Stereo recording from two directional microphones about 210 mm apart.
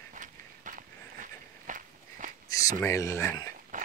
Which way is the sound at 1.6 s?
40° right (ahead or behind).